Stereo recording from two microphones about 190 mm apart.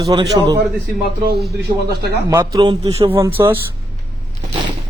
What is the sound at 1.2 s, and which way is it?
Speech, 55° right (ahead or behind).